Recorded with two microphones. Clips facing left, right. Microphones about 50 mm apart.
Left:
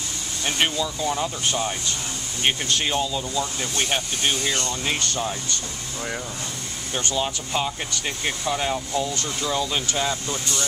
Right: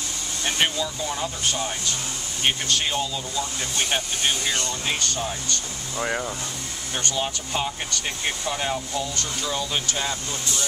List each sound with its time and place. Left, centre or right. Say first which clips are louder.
0.5 s speech: left 1 dB; centre
2.4 s speech: left 1 dB; centre
4.9 s speech: left 1 dB; centre
5.9 s speech: right 5 dB; right
7.2 s speech: left 2 dB; centre
8.9 s speech: left 3 dB; centre